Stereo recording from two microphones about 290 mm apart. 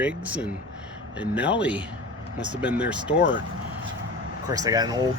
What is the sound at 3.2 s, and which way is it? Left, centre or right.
Speech, left.